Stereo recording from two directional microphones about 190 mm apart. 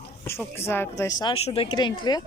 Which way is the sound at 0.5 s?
10° left (ahead or behind).